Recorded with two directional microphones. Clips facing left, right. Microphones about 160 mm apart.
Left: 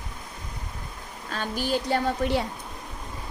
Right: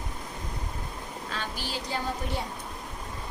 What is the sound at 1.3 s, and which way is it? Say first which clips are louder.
A woman's voice: left 9 dB; 50° left (ahead or behind).